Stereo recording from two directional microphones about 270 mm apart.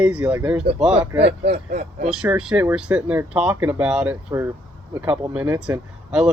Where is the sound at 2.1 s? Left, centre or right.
Centre.